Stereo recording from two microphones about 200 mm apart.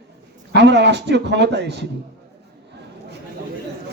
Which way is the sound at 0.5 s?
60° right (ahead or behind).